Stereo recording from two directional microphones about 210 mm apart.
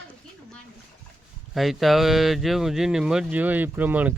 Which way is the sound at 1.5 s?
Centre (ahead or behind).